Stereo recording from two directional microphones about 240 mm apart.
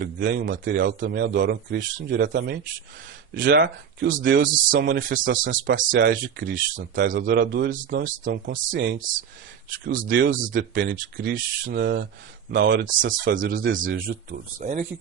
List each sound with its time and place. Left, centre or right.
0.0 s speech: right
6.7 s speech: right